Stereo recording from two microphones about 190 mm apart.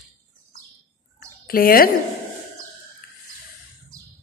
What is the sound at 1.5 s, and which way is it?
Speech, 50° left (ahead or behind).